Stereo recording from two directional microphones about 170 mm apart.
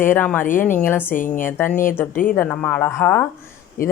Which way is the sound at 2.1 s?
55° left (ahead or behind).